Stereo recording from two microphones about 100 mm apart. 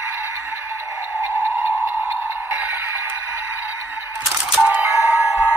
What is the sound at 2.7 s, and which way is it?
Music, 20° right (ahead or behind).